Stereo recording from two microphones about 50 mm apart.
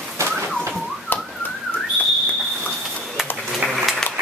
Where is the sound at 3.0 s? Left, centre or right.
Centre.